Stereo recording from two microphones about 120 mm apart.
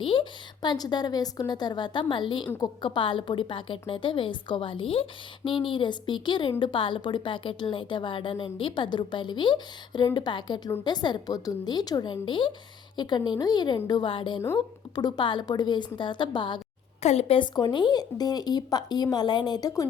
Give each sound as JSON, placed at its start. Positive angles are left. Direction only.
{"t": 0.0, "sound": "a woman's voice", "side_deg": 45}
{"t": 17.0, "sound": "a woman's voice", "side_deg": 60}